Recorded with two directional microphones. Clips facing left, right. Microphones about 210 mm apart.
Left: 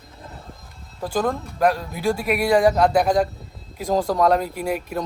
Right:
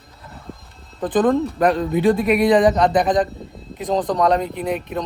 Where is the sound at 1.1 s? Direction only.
Centre (ahead or behind).